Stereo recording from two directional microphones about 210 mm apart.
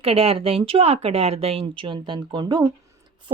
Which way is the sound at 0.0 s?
30° right (ahead or behind).